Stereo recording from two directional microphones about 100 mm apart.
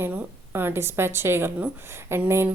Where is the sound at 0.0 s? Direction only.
20° right (ahead or behind).